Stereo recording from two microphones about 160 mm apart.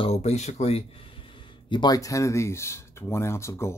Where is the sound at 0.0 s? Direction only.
40° left (ahead or behind).